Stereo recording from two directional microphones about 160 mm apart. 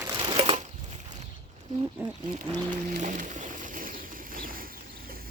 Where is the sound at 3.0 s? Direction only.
50° right (ahead or behind).